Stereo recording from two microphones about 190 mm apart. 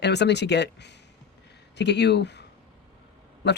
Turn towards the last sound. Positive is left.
turn(degrees=65)  # may be behind; listen again after turning